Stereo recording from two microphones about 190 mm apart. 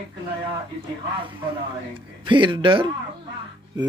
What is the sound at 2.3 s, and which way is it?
Speech, 25° right (ahead or behind).